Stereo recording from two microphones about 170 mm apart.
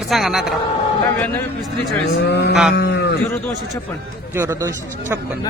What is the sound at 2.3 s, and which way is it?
Vehicle, 80° left.